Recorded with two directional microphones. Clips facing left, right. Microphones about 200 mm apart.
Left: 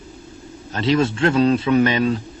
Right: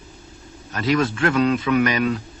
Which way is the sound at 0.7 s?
30° left (ahead or behind).